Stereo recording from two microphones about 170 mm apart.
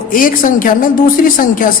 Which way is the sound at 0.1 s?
55° left (ahead or behind).